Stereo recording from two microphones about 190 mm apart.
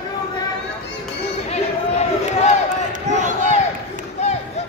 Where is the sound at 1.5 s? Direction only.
35° left (ahead or behind).